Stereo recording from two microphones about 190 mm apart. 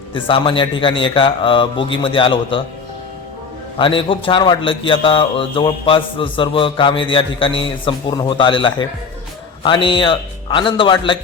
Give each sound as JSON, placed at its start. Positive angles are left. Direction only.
{"t": 0.1, "sound": "a man's voice", "side_deg": 25}
{"t": 3.8, "sound": "a man's voice", "side_deg": 25}